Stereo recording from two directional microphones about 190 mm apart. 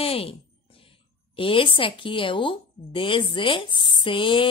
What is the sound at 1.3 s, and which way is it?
A woman's voice, 25° left (ahead or behind).